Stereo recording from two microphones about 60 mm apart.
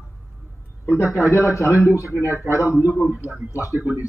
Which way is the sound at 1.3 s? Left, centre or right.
Left.